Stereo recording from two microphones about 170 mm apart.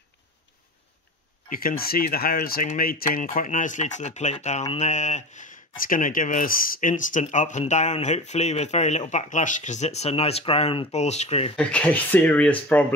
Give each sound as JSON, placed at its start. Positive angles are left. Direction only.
{"t": 1.5, "sound": "speech", "side_deg": 55}
{"t": 11.5, "sound": "speech", "side_deg": 5}